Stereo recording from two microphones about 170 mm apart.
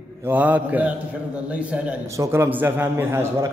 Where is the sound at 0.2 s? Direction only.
10° right (ahead or behind).